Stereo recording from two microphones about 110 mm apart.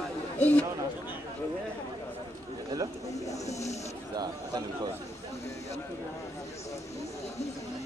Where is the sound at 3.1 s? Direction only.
30° left (ahead or behind).